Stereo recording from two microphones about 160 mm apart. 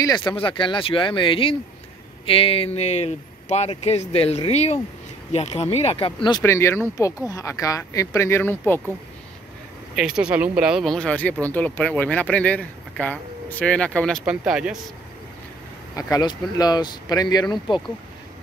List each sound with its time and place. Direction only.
0.0 s speech: 25° left (ahead or behind)
6.4 s speech: 15° left (ahead or behind)
9.9 s speech: 5° right (ahead or behind)
14.2 s speech: 5° right (ahead or behind)
16.0 s speech: 25° left (ahead or behind)